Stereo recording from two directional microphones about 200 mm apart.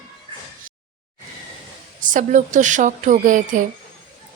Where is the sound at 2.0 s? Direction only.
40° right (ahead or behind).